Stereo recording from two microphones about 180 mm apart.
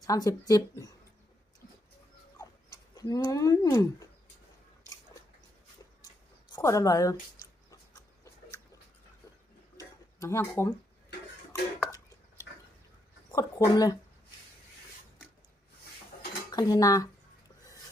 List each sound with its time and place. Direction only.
0.0 s speech: 20° left (ahead or behind)
2.9 s speech: 20° left (ahead or behind)
6.5 s a woman's voice: 15° left (ahead or behind)
7.7 s a sound: 20° left (ahead or behind)
9.7 s tick-tock: 15° left (ahead or behind)
11.9 s a sound: 15° right (ahead or behind)
13.3 s speech: 20° left (ahead or behind)
16.5 s speech: 20° left (ahead or behind)